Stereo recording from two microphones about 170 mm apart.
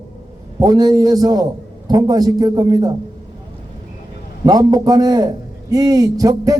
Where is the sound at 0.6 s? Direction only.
20° right (ahead or behind).